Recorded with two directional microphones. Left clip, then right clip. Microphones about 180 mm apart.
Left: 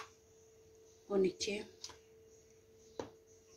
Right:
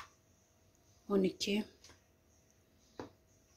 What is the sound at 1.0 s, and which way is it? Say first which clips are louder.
Speech: even; 60° right (ahead or behind).